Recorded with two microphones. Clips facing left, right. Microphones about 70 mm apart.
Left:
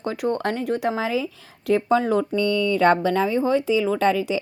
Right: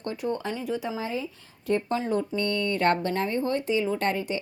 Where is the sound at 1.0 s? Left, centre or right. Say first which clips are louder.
Left 7 dB; left.